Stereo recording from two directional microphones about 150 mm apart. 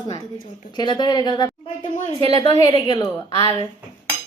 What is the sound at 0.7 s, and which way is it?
A woman's voice, 30° left (ahead or behind).